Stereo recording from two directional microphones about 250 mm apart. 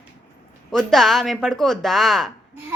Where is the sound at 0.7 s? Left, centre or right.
Centre.